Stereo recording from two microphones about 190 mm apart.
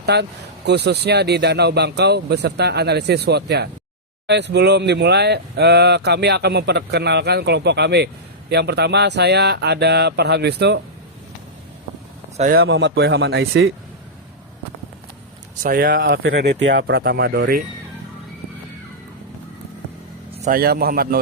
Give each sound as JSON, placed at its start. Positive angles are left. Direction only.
{"t": 0.0, "sound": "speech", "side_deg": -60}
{"t": 12.4, "sound": "a man's voice", "side_deg": -50}
{"t": 12.6, "sound": "speech", "side_deg": -75}
{"t": 15.6, "sound": "a man's voice", "side_deg": -55}
{"t": 20.5, "sound": "a man's voice", "side_deg": -50}